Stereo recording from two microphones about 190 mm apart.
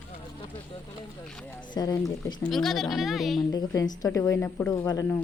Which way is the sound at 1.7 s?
20° left (ahead or behind).